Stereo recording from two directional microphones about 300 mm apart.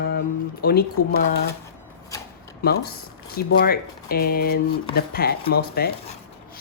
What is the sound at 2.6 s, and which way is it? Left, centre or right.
Speech, left.